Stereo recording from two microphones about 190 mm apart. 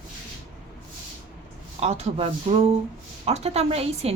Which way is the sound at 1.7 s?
35° right (ahead or behind).